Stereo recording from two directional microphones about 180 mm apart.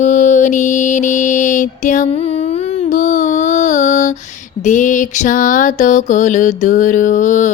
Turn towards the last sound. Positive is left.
turn(degrees=45)  # may be behind; listen again after turning